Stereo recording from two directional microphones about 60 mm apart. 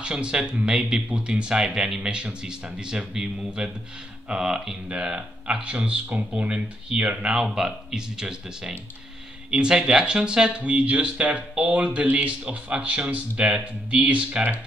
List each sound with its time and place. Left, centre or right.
0.0 s speech: centre